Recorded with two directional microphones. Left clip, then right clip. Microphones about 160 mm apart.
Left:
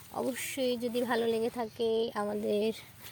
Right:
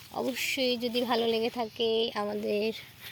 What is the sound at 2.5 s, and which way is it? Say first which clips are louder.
Speech: even; 15° left (ahead or behind).